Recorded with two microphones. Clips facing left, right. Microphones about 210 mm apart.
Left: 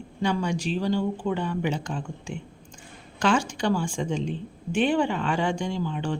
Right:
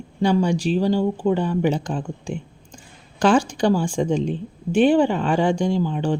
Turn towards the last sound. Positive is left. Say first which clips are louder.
# right 7 dB
turn(degrees=-35)  # may be behind; listen again after turning